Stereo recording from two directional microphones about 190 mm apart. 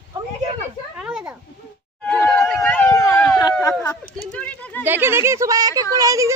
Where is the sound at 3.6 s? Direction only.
20° left (ahead or behind).